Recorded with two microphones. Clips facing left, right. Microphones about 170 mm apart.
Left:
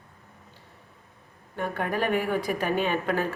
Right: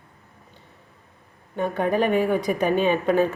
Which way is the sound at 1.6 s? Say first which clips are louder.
Right 6 dB; 20° right (ahead or behind).